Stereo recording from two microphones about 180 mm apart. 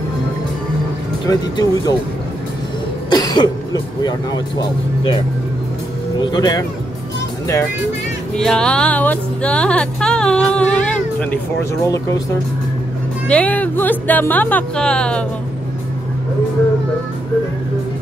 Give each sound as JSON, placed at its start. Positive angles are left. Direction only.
{"t": 1.2, "sound": "speech", "side_deg": 20}
{"t": 3.1, "sound": "speech", "side_deg": 20}
{"t": 6.3, "sound": "speech", "side_deg": 20}
{"t": 8.4, "sound": "speech", "side_deg": 5}
{"t": 11.8, "sound": "speech", "side_deg": 20}
{"t": 13.3, "sound": "speech", "side_deg": 5}